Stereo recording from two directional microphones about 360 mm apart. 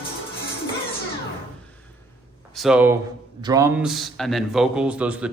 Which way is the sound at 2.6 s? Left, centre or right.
Centre.